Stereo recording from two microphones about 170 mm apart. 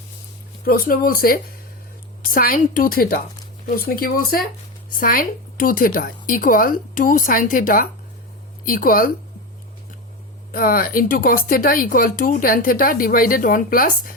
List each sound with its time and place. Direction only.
0.6 s speech: 60° left (ahead or behind)
10.5 s speech: 60° left (ahead or behind)